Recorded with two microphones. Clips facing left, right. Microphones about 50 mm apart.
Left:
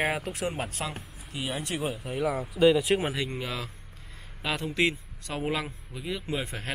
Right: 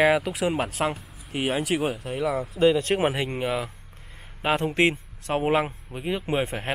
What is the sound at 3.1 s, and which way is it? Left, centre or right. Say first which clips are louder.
Speech: right 6 dB; right.